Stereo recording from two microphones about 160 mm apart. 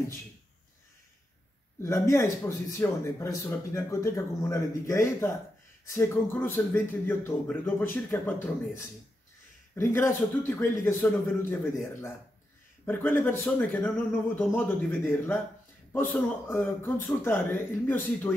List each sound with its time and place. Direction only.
1.8 s speech: 15° left (ahead or behind)
12.8 s speech: 15° left (ahead or behind)